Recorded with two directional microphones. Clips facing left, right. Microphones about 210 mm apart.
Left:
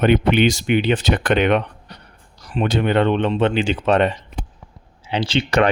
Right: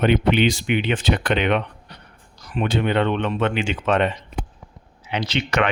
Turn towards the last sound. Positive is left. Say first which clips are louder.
# left 4 dB
turn(degrees=30)  # may be behind; listen again after turning